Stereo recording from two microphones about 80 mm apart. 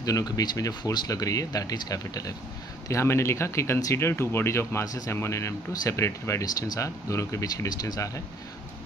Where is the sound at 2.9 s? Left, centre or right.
Left.